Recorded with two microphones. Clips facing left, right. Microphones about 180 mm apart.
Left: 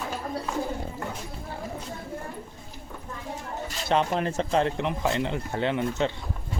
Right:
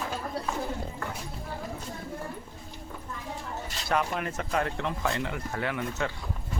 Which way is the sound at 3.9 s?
30° left (ahead or behind).